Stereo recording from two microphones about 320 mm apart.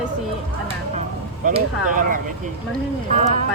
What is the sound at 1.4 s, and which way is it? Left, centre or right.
Speech, right.